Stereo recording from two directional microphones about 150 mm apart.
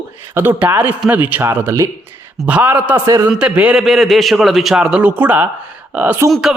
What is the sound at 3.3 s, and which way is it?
A man's voice, 5° right (ahead or behind).